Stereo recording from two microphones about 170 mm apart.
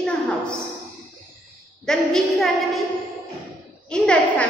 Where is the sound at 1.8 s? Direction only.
5° left (ahead or behind).